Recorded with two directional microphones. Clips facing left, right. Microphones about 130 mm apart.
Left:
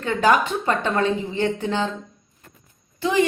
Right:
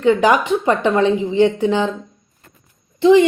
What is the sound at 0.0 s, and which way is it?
A woman's voice, 15° right (ahead or behind).